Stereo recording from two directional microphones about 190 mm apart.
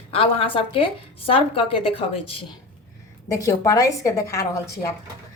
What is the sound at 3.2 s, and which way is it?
A woman's voice, 15° left (ahead or behind).